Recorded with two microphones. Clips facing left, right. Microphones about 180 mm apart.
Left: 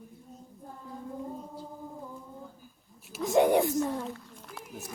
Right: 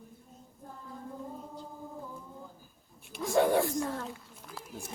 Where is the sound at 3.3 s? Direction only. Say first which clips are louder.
Left 3 dB; 20° left (ahead or behind).